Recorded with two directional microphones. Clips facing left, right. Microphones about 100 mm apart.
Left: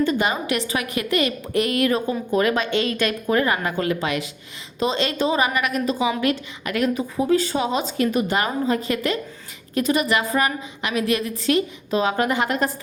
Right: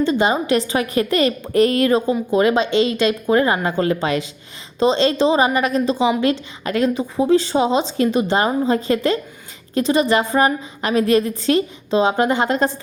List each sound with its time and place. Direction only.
0.0 s a woman's voice: 25° right (ahead or behind)